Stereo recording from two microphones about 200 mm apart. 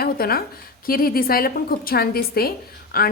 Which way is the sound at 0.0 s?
50° left (ahead or behind).